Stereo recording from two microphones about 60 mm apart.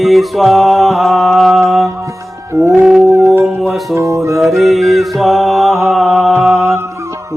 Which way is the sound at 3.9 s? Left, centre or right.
Right.